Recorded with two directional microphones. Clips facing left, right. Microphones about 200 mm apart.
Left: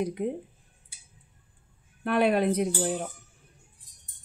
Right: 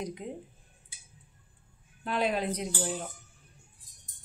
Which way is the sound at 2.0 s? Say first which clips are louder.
Left 7 dB; 60° left (ahead or behind).